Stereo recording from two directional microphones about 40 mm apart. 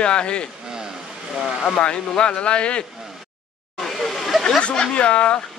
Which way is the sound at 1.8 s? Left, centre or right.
Left.